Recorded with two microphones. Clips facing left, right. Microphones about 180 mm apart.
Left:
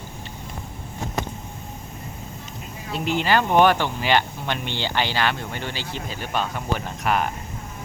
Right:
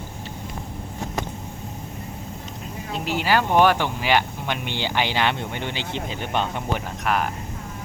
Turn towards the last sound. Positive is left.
turn(degrees=0)  # may be behind; listen again after turning